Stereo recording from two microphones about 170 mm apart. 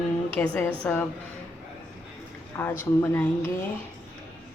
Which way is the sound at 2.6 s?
10° left (ahead or behind).